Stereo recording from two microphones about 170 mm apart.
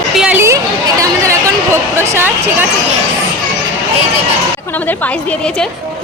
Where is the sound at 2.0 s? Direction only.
15° right (ahead or behind).